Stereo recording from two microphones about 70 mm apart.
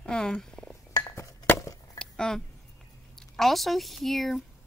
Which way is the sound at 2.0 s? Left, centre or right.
Centre.